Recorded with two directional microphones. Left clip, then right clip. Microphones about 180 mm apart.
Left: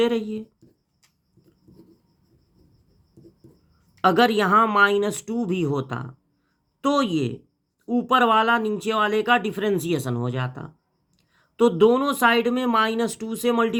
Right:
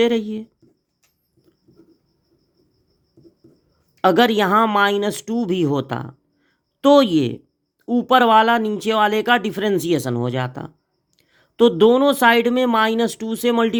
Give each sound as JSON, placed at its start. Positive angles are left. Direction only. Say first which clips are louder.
{"t": 0.0, "sound": "speech", "louder": "right 4 dB", "side_deg": -30}
{"t": 4.0, "sound": "speech", "louder": "right 3 dB", "side_deg": -30}